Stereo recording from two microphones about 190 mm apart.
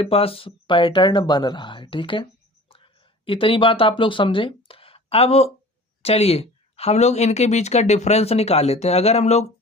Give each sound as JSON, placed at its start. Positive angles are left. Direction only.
{"t": 0.0, "sound": "speech", "side_deg": 30}